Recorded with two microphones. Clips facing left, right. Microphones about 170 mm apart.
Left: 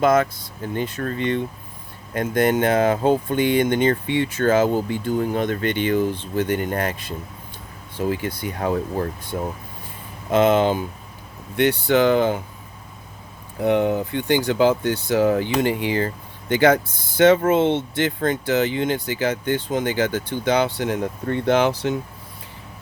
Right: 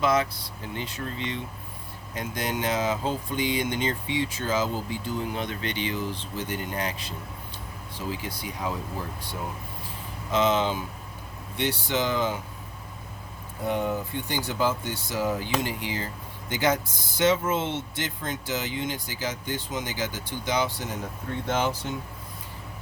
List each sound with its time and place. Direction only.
0.0 s speech: 50° left (ahead or behind)
13.6 s speech: 70° left (ahead or behind)